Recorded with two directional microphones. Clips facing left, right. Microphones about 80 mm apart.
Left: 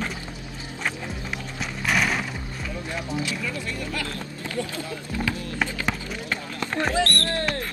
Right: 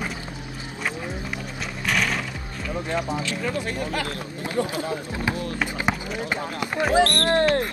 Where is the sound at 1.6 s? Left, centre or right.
Centre.